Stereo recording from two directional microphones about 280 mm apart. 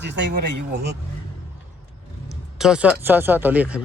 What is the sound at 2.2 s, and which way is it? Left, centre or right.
Speech, centre.